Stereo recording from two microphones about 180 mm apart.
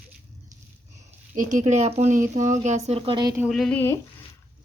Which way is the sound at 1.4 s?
45° right (ahead or behind).